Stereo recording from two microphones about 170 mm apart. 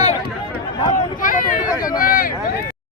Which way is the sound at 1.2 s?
50° left (ahead or behind).